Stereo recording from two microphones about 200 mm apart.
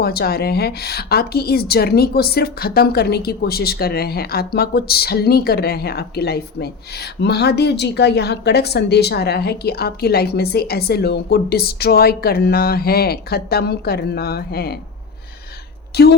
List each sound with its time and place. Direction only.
0.0 s a woman's voice: 50° left (ahead or behind)
15.9 s a woman's voice: 50° left (ahead or behind)